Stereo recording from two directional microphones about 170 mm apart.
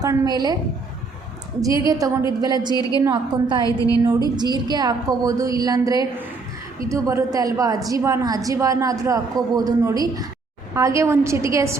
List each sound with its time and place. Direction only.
0.0 s a woman's voice: 20° right (ahead or behind)
1.9 s a woman's voice: 20° right (ahead or behind)
3.6 s a woman's voice: 20° left (ahead or behind)
4.4 s a woman's voice: 25° right (ahead or behind)